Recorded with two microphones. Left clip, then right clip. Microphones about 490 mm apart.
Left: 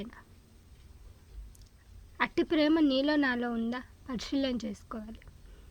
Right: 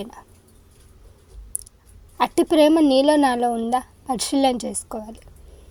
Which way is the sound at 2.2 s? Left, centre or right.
Left.